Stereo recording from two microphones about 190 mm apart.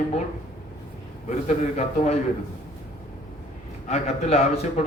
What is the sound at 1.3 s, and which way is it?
Speech, 35° left (ahead or behind).